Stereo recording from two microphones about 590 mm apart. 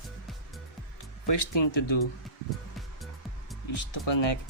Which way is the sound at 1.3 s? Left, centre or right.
Left.